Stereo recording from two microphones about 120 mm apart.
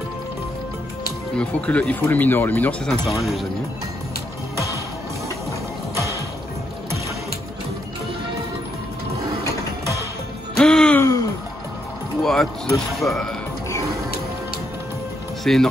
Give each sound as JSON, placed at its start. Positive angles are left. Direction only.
{"t": 1.4, "sound": "speech", "side_deg": 10}
{"t": 3.2, "sound": "a man's voice", "side_deg": 0}
{"t": 5.9, "sound": "music", "side_deg": -25}
{"t": 10.6, "sound": "music", "side_deg": 5}
{"t": 11.0, "sound": "a sound", "side_deg": 25}
{"t": 12.2, "sound": "speech", "side_deg": 5}
{"t": 15.4, "sound": "speech", "side_deg": 5}